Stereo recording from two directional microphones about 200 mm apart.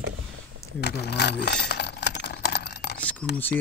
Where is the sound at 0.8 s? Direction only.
55° left (ahead or behind).